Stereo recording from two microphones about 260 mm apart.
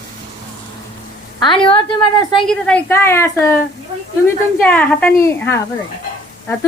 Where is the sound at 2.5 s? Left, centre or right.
Centre.